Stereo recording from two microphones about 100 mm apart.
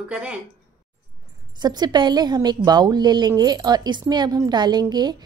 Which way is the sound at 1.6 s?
45° right (ahead or behind).